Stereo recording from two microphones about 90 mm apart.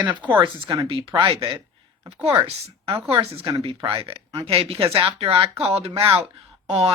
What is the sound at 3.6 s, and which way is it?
Speech, 90° right.